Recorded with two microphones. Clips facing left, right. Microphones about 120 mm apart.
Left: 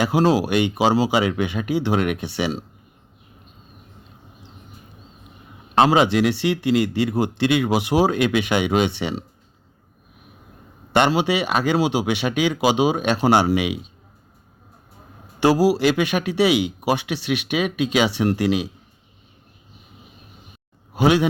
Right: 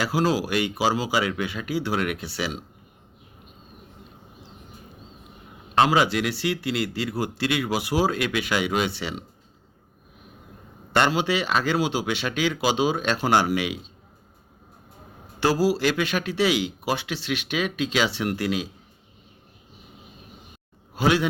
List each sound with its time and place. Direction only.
0.0 s a man's voice: 25° left (ahead or behind)
5.7 s a man's voice: 25° left (ahead or behind)
10.9 s speech: 20° left (ahead or behind)
15.4 s a man's voice: 15° left (ahead or behind)
20.9 s speech: 20° left (ahead or behind)